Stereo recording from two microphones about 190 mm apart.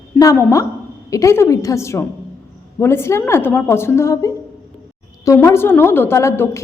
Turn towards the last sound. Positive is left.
turn(degrees=15)  # may be behind; listen again after turning